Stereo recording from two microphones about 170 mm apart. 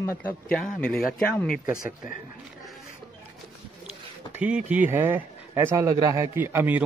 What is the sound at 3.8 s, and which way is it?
Speech, 5° right (ahead or behind).